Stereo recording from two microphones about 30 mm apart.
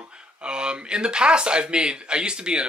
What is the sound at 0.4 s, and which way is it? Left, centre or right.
Speech, right.